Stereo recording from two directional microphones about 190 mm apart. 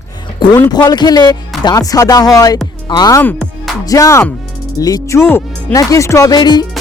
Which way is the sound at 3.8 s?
20° left (ahead or behind).